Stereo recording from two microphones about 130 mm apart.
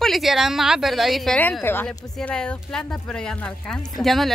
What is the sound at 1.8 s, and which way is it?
A woman's voice, 5° left (ahead or behind).